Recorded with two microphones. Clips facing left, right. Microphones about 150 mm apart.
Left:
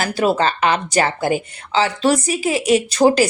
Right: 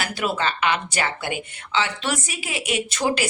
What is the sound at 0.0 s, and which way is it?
Speech, 40° left (ahead or behind).